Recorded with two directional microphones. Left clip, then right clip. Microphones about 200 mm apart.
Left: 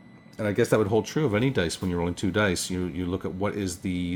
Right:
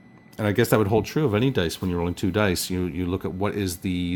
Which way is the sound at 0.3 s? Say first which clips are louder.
Right 2 dB; 45° right (ahead or behind).